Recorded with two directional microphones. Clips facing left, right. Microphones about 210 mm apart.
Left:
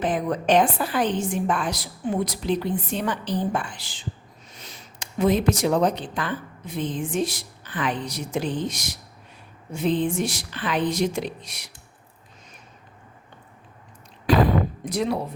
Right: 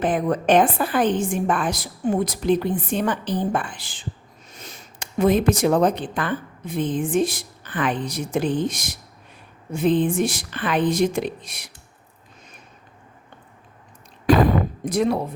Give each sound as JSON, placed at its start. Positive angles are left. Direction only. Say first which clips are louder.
{"t": 0.0, "sound": "a woman's voice", "louder": "right 3 dB", "side_deg": -55}
{"t": 14.3, "sound": "a sound", "louder": "right 3 dB", "side_deg": -45}
{"t": 14.8, "sound": "a woman's voice", "louder": "right 8 dB", "side_deg": -50}